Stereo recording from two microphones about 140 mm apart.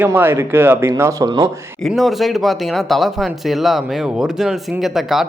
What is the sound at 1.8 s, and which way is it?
Speech, centre (ahead or behind).